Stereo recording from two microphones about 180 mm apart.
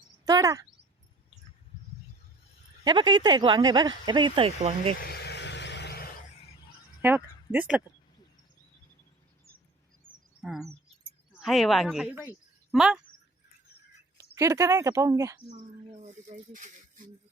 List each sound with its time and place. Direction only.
0.3 s speech: 20° right (ahead or behind)
2.8 s speech: 25° right (ahead or behind)
4.9 s vehicle: 60° left (ahead or behind)
7.0 s speech: 10° right (ahead or behind)
11.3 s speech: centre (ahead or behind)
14.3 s speech: 15° right (ahead or behind)
15.4 s speech: 40° right (ahead or behind)